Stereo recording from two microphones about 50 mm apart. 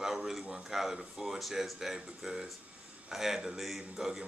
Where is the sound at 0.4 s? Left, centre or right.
Right.